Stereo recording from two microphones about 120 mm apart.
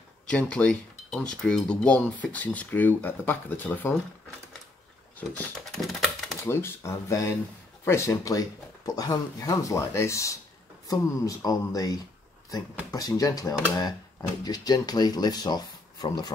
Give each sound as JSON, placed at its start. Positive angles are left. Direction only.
{"t": 0.3, "sound": "speech", "side_deg": 10}
{"t": 5.7, "sound": "typing", "side_deg": 0}
{"t": 6.4, "sound": "speech", "side_deg": 20}